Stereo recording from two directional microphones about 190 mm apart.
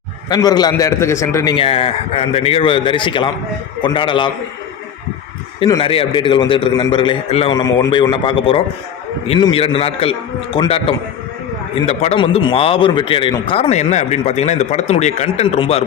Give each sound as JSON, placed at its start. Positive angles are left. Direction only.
{"t": 0.3, "sound": "a man's voice", "side_deg": 20}
{"t": 1.5, "sound": "a man's voice", "side_deg": 30}
{"t": 5.5, "sound": "a man's voice", "side_deg": 25}
{"t": 7.5, "sound": "a man's voice", "side_deg": 20}